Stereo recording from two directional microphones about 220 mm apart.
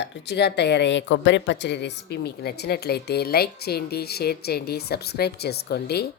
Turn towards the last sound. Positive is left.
turn(degrees=45)  # may be behind; listen again after turning